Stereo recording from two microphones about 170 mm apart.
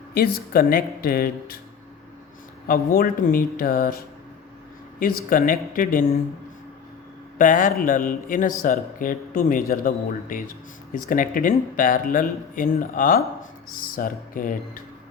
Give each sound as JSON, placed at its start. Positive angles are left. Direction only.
{"t": 0.1, "sound": "speech", "side_deg": 60}
{"t": 2.6, "sound": "speech", "side_deg": 55}
{"t": 7.3, "sound": "speech", "side_deg": 50}